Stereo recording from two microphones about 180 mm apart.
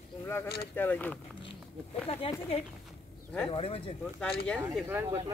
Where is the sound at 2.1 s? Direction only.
30° left (ahead or behind).